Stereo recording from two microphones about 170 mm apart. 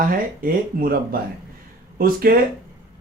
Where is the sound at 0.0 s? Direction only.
55° right (ahead or behind).